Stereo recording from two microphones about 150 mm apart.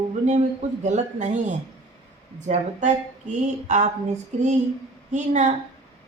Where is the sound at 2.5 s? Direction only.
50° right (ahead or behind).